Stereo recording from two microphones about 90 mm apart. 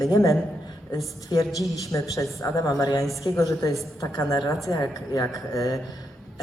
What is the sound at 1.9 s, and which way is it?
A woman's voice, 35° left (ahead or behind).